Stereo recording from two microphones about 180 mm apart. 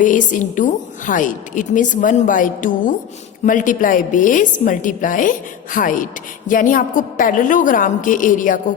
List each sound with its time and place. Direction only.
0.0 s a woman's voice: 45° left (ahead or behind)